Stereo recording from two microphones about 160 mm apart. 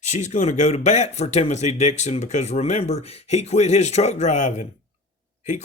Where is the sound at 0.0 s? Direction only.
50° left (ahead or behind).